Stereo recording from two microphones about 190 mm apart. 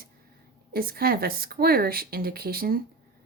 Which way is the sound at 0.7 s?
50° right (ahead or behind).